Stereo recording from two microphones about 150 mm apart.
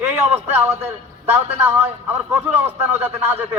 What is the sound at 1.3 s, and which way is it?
A man's voice, 15° right (ahead or behind).